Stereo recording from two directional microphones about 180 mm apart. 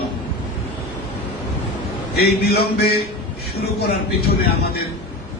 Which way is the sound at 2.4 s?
60° left (ahead or behind).